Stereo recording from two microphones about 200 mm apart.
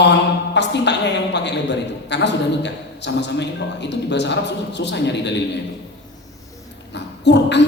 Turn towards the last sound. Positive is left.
turn(degrees=60)  # may be behind; listen again after turning